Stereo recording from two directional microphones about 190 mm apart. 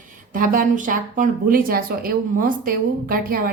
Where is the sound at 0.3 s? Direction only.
45° right (ahead or behind).